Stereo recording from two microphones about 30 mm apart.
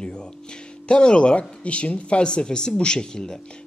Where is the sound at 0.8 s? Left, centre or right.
Left.